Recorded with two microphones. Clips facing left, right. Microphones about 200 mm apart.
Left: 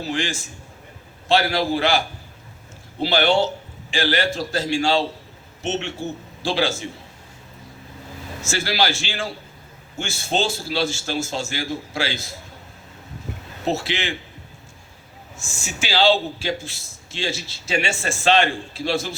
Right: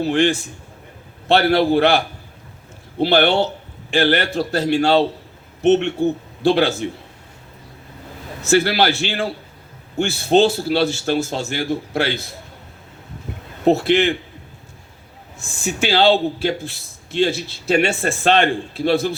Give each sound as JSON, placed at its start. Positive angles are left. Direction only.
{"t": 0.0, "sound": "a man's voice", "side_deg": -60}
{"t": 8.4, "sound": "a man's voice", "side_deg": -60}
{"t": 13.7, "sound": "a man's voice", "side_deg": -55}
{"t": 15.4, "sound": "a man's voice", "side_deg": -60}